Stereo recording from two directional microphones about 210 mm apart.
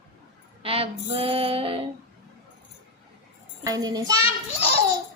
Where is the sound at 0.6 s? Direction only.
25° right (ahead or behind).